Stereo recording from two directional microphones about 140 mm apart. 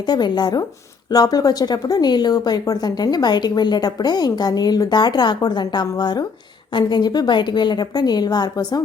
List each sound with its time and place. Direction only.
0.1 s a woman's voice: 30° left (ahead or behind)